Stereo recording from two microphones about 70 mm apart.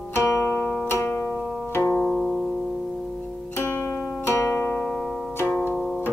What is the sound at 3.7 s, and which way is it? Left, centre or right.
Zither, left.